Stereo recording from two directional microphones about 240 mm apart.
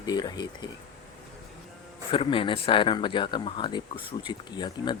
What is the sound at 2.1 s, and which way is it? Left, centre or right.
Speech, left.